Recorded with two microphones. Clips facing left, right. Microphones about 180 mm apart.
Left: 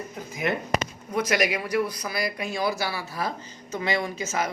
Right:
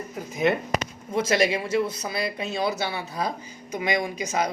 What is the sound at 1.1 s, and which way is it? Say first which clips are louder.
Speech: right 2 dB; 25° right (ahead or behind).